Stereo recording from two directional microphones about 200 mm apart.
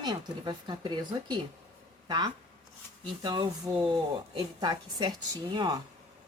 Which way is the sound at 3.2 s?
20° right (ahead or behind).